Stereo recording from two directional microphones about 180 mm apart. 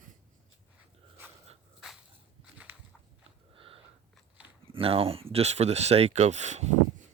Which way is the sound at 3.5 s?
30° right (ahead or behind).